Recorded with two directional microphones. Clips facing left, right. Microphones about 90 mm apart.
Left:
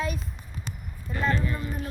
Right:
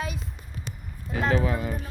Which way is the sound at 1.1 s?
90° right.